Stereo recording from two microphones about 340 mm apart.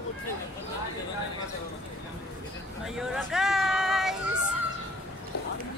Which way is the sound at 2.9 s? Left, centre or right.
Centre.